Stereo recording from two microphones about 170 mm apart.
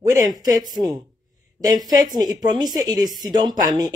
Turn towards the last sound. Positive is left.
turn(degrees=-20)  # may be behind; listen again after turning